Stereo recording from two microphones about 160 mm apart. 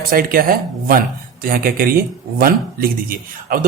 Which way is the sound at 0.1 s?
65° right (ahead or behind).